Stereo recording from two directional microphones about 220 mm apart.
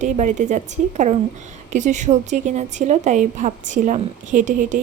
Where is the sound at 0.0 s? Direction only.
35° right (ahead or behind).